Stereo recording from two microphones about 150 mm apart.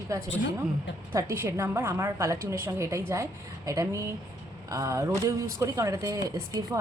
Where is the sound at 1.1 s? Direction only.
20° right (ahead or behind).